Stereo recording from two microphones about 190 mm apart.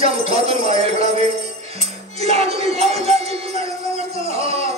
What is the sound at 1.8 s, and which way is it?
Music, 35° right (ahead or behind).